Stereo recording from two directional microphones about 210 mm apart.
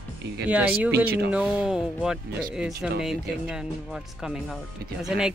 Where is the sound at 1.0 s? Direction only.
50° right (ahead or behind).